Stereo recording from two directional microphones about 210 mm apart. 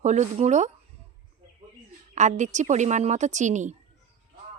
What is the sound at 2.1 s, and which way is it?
Speech, 35° right (ahead or behind).